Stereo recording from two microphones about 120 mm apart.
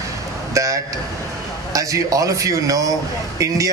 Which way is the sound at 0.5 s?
25° right (ahead or behind).